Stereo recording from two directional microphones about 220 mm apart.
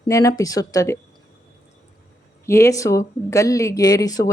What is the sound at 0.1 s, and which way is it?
Speech, 15° left (ahead or behind).